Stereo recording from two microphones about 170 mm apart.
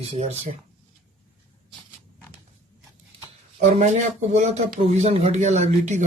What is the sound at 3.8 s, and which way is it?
Speech, 45° right (ahead or behind).